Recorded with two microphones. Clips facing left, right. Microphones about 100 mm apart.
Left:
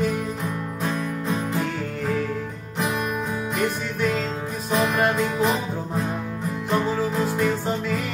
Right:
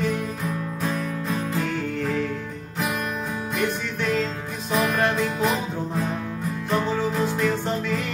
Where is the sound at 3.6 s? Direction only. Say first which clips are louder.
Left 1 dB; 5° left (ahead or behind).